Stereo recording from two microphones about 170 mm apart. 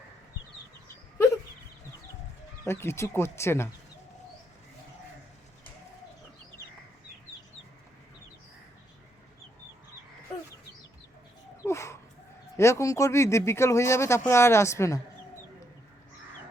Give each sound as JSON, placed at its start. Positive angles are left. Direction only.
{"t": 2.6, "sound": "speech", "side_deg": 15}
{"t": 11.6, "sound": "a sound", "side_deg": 15}
{"t": 12.5, "sound": "speech", "side_deg": 15}